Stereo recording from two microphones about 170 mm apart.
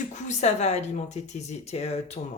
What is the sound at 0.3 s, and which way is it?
Speech, 40° left (ahead or behind).